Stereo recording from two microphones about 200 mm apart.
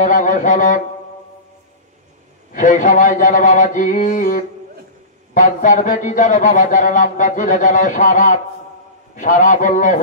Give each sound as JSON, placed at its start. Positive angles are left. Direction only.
{"t": 0.0, "sound": "a man's voice", "side_deg": 40}
{"t": 2.5, "sound": "a man's voice", "side_deg": 40}